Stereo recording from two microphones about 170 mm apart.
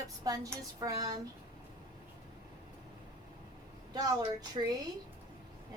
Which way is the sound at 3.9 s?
20° right (ahead or behind).